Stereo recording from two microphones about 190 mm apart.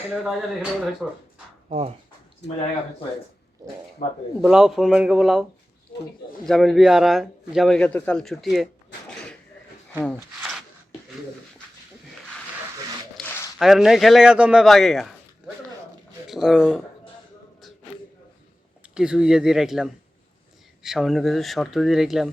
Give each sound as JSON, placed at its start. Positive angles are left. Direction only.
{"t": 0.1, "sound": "a man's voice", "side_deg": 0}
{"t": 2.4, "sound": "speech", "side_deg": 65}
{"t": 4.4, "sound": "a man's voice", "side_deg": 0}
{"t": 5.9, "sound": "a sound", "side_deg": 45}
{"t": 6.4, "sound": "a man's voice", "side_deg": 0}
{"t": 13.1, "sound": "a sound", "side_deg": 10}
{"t": 13.6, "sound": "a man's voice", "side_deg": 0}
{"t": 18.9, "sound": "a man's voice", "side_deg": -5}